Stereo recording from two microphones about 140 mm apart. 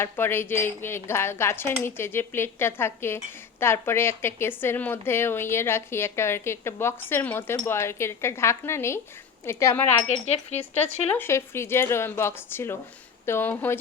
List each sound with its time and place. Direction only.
0.0 s a woman's voice: 15° left (ahead or behind)
10.0 s speech: 50° left (ahead or behind)
11.2 s a woman's voice: 20° left (ahead or behind)